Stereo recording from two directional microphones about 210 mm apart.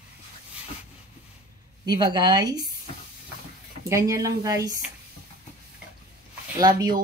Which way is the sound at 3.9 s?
15° right (ahead or behind).